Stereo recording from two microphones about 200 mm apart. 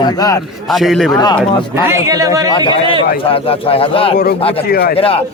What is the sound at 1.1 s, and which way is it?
Speech, 20° left (ahead or behind).